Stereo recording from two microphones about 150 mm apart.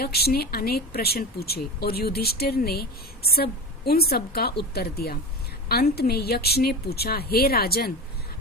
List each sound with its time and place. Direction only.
0.0 s speech: 90° left